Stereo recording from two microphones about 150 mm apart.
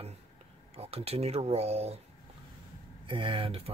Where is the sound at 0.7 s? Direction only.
40° right (ahead or behind).